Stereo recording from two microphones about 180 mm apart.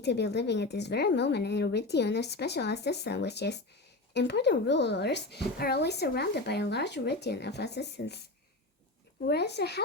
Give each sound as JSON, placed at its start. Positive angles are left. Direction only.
{"t": 0.0, "sound": "speech", "side_deg": 70}
{"t": 9.2, "sound": "speech", "side_deg": 65}